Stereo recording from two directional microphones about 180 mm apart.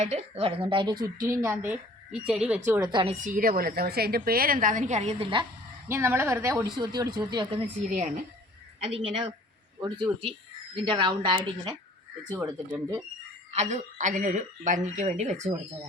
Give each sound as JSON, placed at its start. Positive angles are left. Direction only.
{"t": 0.0, "sound": "speech", "side_deg": -35}
{"t": 1.3, "sound": "speech", "side_deg": -15}
{"t": 2.8, "sound": "speech", "side_deg": -25}
{"t": 3.2, "sound": "a woman's voice", "side_deg": -45}
{"t": 5.9, "sound": "speech", "side_deg": -15}
{"t": 7.9, "sound": "a woman's voice", "side_deg": -40}
{"t": 8.9, "sound": "speech", "side_deg": -30}
{"t": 13.5, "sound": "speech", "side_deg": -40}